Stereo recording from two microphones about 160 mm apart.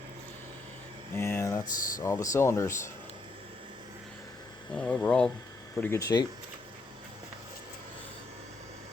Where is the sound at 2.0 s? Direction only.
20° left (ahead or behind).